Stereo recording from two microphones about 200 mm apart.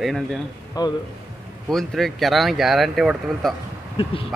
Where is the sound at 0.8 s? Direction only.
20° left (ahead or behind).